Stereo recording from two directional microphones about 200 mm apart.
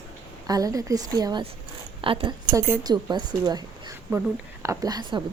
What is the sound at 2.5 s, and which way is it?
A woman's voice, 15° right (ahead or behind).